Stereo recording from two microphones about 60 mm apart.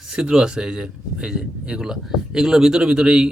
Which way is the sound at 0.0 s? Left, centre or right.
Centre.